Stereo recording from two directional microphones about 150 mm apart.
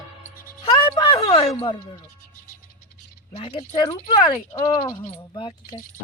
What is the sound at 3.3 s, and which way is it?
Speech, 40° left (ahead or behind).